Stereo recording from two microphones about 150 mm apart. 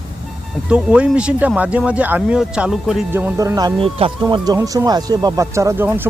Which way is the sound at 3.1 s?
15° right (ahead or behind).